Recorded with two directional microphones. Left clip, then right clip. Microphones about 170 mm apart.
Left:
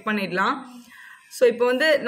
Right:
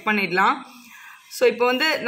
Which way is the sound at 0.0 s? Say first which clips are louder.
Right 4 dB; 35° right (ahead or behind).